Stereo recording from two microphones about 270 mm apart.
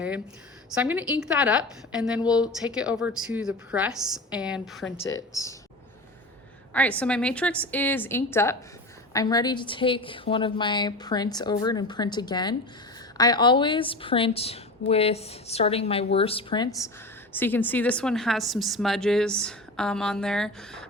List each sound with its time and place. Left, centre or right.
0.7 s a woman's voice: centre
5.0 s a woman's voice: centre
6.7 s a woman's voice: centre
17.3 s a woman's voice: centre